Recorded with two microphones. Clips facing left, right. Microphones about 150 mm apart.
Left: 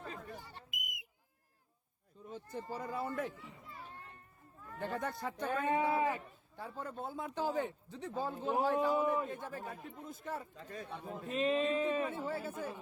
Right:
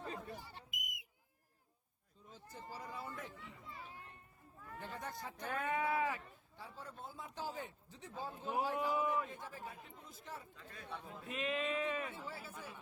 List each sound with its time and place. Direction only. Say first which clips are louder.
0.0 s smoke detector: even; 20° right (ahead or behind)
0.7 s whistle: left 3 dB; 55° left (ahead or behind)
2.2 s speech: left 9 dB; 60° left (ahead or behind)
4.8 s speech: left 8 dB; 65° left (ahead or behind)
5.5 s speech: left 4 dB; 30° left (ahead or behind)
6.6 s speech: left 8 dB; 55° left (ahead or behind); by 8.7 s 90° left
9.2 s speech: left 6 dB; 55° left (ahead or behind)
10.6 s speech: left 5 dB; 40° left (ahead or behind)
12.0 s speech: left 9 dB; 55° left (ahead or behind)